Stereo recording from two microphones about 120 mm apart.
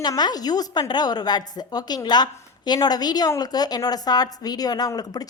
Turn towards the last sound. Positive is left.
turn(degrees=30)  # may be behind; listen again after turning